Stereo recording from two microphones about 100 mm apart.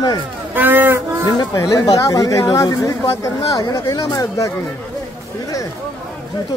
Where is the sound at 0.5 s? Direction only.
20° right (ahead or behind).